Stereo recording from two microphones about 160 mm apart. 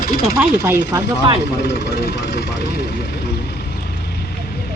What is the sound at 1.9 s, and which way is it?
Speech, 90° left.